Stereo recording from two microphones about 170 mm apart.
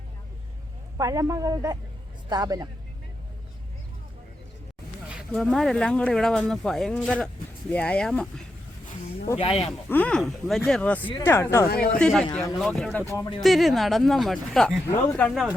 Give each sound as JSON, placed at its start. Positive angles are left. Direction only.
{"t": 0.9, "sound": "a woman's voice", "side_deg": -20}
{"t": 5.1, "sound": "speech", "side_deg": 5}
{"t": 9.4, "sound": "speech", "side_deg": 35}
{"t": 9.9, "sound": "speech", "side_deg": 5}
{"t": 11.7, "sound": "speech", "side_deg": 65}
{"t": 11.9, "sound": "speech", "side_deg": 5}
{"t": 13.1, "sound": "speech", "side_deg": 25}
{"t": 13.4, "sound": "speech", "side_deg": 0}